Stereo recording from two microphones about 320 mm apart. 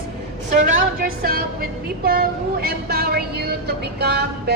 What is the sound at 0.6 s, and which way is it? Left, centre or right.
A woman's voice, right.